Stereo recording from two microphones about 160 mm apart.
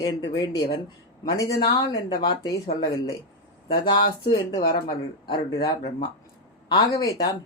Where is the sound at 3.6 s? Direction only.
30° left (ahead or behind).